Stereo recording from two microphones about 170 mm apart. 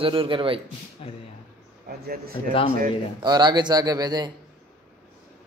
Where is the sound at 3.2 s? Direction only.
25° right (ahead or behind).